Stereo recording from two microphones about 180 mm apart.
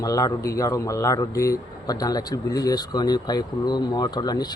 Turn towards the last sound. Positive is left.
turn(degrees=20)  # may be behind; listen again after turning